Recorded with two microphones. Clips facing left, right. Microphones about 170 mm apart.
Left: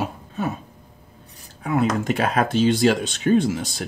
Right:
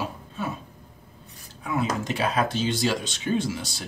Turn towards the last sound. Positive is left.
turn(degrees=50)  # may be behind; listen again after turning